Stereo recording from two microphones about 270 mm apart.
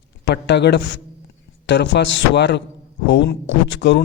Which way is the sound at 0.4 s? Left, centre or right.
Left.